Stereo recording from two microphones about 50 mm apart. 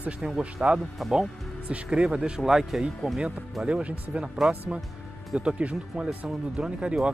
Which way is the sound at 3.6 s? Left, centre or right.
Right.